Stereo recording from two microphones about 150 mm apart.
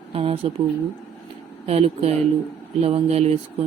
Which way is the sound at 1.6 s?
45° right (ahead or behind).